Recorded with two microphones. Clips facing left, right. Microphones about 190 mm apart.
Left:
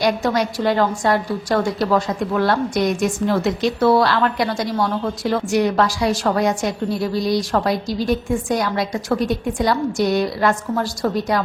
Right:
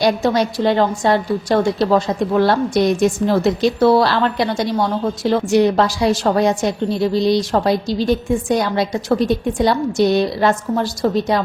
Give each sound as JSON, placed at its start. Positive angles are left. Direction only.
{"t": 0.0, "sound": "a woman's voice", "side_deg": -25}